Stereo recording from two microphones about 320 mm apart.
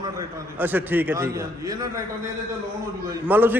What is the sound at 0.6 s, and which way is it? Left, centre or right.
A man's voice, centre.